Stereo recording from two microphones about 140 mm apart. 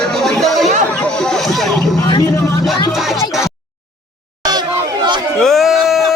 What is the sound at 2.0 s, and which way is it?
Vehicle, 25° left (ahead or behind).